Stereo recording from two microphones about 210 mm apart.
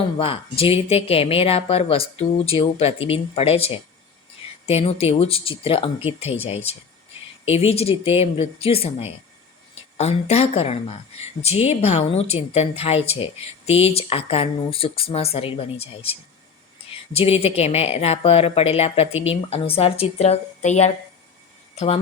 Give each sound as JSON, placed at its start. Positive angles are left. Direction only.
{"t": 0.2, "sound": "a woman's voice", "side_deg": 25}